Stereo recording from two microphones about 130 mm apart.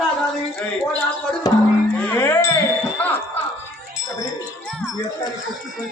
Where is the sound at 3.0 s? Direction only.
10° left (ahead or behind).